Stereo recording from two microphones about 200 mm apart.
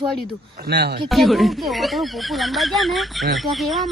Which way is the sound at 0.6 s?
55° right (ahead or behind).